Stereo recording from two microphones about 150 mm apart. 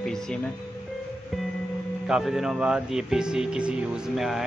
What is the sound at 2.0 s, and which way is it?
Speech, 5° right (ahead or behind).